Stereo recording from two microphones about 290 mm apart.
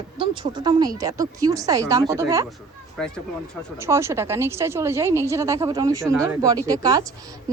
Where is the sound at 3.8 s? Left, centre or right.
Centre.